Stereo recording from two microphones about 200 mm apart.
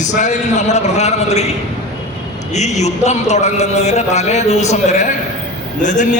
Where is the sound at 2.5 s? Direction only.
35° left (ahead or behind).